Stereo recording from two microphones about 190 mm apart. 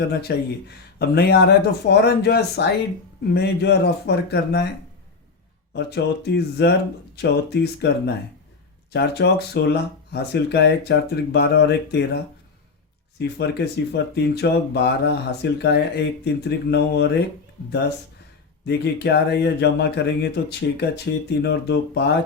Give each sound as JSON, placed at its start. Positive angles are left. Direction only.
{"t": 0.1, "sound": "speech", "side_deg": 60}
{"t": 5.7, "sound": "speech", "side_deg": 60}